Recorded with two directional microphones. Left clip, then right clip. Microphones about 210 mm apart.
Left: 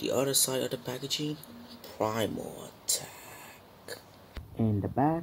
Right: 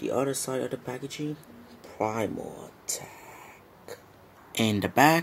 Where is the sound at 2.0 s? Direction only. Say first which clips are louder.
Right 2 dB; 10° right (ahead or behind).